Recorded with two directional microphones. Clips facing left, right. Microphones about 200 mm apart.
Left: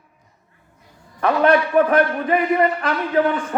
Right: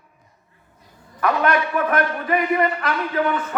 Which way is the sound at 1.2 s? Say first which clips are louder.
Left 4 dB; 30° left (ahead or behind).